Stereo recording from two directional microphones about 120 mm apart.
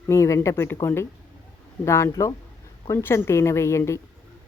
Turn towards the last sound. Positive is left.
turn(degrees=25)  # may be behind; listen again after turning